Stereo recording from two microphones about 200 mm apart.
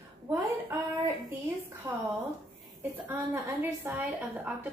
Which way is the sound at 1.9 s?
15° right (ahead or behind).